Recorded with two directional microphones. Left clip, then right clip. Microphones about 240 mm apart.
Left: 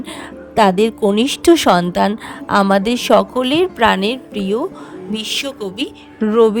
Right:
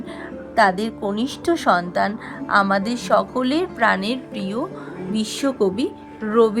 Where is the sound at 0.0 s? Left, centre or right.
Left.